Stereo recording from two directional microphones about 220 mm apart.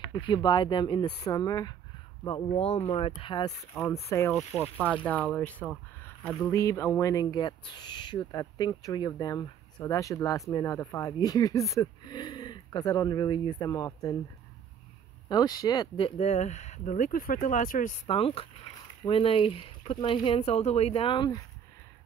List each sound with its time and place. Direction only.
0.1 s speech: 20° left (ahead or behind)
4.4 s speech: 5° right (ahead or behind); by 14.1 s 15° left (ahead or behind)
15.2 s speech: 20° left (ahead or behind)
16.2 s speech: 30° left (ahead or behind)
18.0 s speech: 25° left (ahead or behind)